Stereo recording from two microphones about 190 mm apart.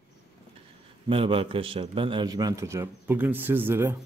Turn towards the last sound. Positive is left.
turn(degrees=-10)  # may be behind; listen again after turning